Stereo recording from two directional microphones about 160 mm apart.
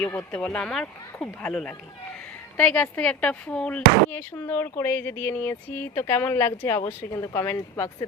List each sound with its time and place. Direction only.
0.0 s speech: 15° left (ahead or behind)